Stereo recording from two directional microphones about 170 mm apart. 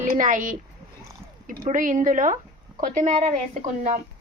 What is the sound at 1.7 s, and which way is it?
A woman's voice, 50° right (ahead or behind).